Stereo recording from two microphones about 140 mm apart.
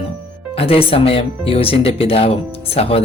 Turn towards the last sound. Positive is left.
turn(degrees=45)  # may be behind; listen again after turning